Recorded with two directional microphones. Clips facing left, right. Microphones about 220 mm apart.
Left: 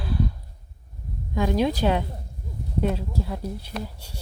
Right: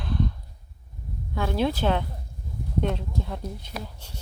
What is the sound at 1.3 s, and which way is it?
Speech, 15° left (ahead or behind).